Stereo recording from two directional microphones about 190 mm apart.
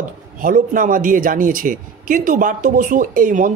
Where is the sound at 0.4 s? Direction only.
45° right (ahead or behind).